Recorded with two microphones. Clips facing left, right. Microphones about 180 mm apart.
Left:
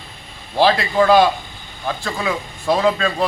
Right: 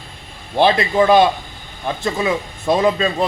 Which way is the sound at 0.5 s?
20° right (ahead or behind).